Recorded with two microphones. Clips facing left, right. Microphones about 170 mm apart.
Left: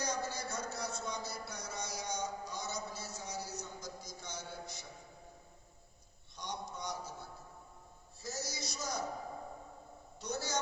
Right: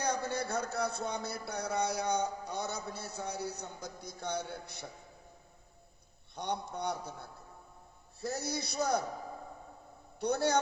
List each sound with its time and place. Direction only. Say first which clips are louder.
0.0 s speech: right 5 dB; 60° right (ahead or behind)
6.3 s speech: right 7 dB; 60° right (ahead or behind)
10.2 s speech: right 9 dB; 60° right (ahead or behind)